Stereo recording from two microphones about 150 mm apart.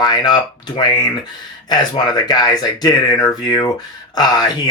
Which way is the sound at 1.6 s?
30° left (ahead or behind).